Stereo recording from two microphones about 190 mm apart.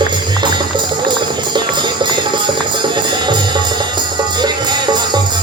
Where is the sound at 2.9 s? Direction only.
25° right (ahead or behind).